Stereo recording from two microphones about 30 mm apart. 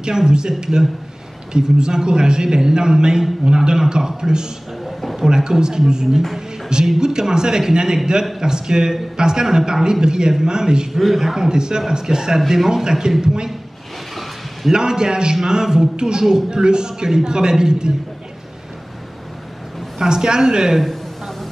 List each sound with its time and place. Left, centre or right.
0.0 s a man's voice: right
10.9 s a man's voice: centre
11.1 s a man's voice: centre
14.7 s a man's voice: right
20.0 s a man's voice: right